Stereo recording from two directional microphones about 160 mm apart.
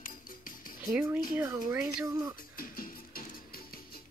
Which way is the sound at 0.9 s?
5° right (ahead or behind).